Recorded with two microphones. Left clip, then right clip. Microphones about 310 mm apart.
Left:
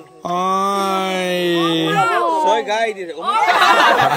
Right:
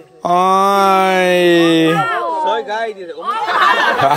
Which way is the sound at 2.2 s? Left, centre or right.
Left.